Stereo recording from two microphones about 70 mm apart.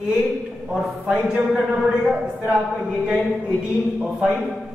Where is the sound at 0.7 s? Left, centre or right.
Centre.